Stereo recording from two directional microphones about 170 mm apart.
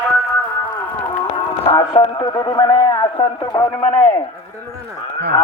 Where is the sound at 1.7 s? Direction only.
25° left (ahead or behind).